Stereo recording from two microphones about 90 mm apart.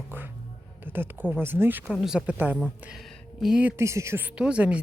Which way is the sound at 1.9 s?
5° right (ahead or behind).